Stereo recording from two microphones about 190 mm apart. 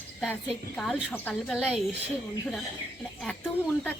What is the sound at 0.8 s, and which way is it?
Speech, 5° left (ahead or behind).